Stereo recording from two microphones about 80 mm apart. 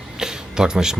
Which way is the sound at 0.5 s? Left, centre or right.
Centre.